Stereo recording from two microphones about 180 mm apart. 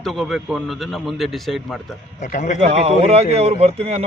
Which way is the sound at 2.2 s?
40° left (ahead or behind).